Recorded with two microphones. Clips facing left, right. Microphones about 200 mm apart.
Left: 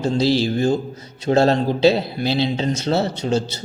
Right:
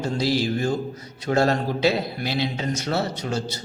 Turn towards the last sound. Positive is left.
turn(degrees=25)  # may be behind; listen again after turning